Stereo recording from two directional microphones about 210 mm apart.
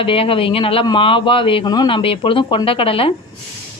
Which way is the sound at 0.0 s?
25° left (ahead or behind).